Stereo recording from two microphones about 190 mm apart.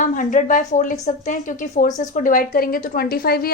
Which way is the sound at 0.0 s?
45° left (ahead or behind).